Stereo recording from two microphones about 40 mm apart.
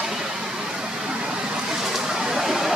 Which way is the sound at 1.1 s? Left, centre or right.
Right.